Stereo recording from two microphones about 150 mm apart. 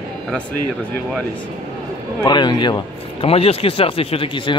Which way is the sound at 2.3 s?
30° left (ahead or behind).